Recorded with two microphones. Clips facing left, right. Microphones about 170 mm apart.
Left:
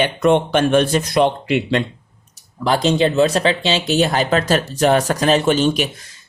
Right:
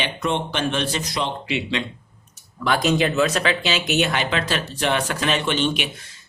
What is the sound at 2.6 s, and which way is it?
Speech, 30° left (ahead or behind).